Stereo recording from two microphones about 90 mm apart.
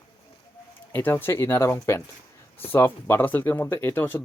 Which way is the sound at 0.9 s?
25° left (ahead or behind).